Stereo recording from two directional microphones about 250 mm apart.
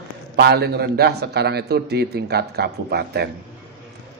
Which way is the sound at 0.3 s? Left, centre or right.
Right.